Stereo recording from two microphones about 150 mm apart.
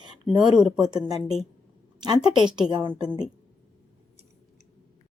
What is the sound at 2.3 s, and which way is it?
Speech, 5° right (ahead or behind).